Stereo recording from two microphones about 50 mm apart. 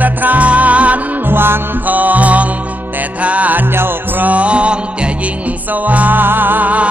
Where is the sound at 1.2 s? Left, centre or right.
Right.